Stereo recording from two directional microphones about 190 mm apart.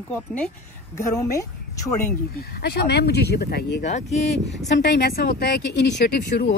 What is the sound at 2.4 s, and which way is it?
Speech, 55° left (ahead or behind).